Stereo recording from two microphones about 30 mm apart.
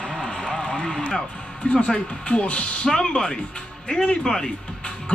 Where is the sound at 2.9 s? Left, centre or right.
Left.